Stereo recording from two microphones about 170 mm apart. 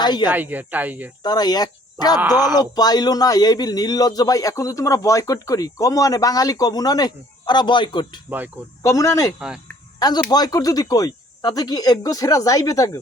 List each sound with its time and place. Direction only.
0.0 s speech: 25° left (ahead or behind)
0.3 s speech: 10° right (ahead or behind)
1.2 s a man's voice: 25° left (ahead or behind)